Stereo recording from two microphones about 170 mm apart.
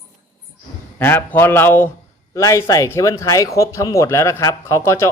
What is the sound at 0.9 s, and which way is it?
Speech, 10° left (ahead or behind).